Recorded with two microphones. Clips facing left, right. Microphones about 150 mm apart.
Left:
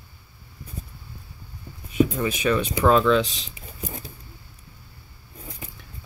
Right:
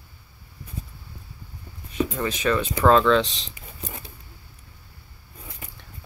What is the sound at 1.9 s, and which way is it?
Speech, 10° left (ahead or behind).